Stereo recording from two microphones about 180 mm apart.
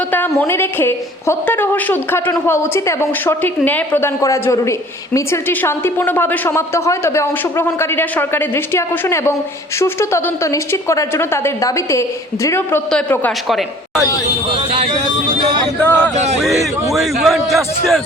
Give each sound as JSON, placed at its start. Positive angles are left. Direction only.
{"t": 0.1, "sound": "a woman's voice", "side_deg": 10}
{"t": 14.5, "sound": "speech", "side_deg": -30}
{"t": 15.8, "sound": "a woman's voice", "side_deg": 10}
{"t": 16.4, "sound": "a woman's voice", "side_deg": 0}